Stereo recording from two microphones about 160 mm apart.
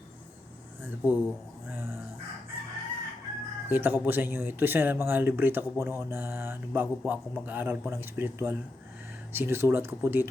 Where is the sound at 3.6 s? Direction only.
10° right (ahead or behind).